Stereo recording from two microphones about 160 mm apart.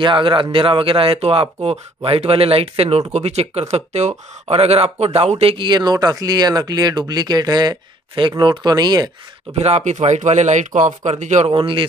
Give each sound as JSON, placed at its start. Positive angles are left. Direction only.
{"t": 0.0, "sound": "speech", "side_deg": -30}
{"t": 9.5, "sound": "speech", "side_deg": -40}
{"t": 11.5, "sound": "speech", "side_deg": -30}